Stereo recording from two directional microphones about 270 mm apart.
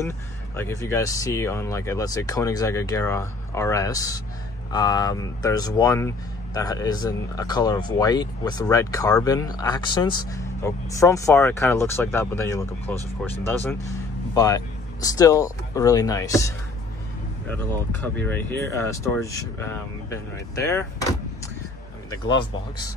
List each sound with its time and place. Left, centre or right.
0.6 s speech: centre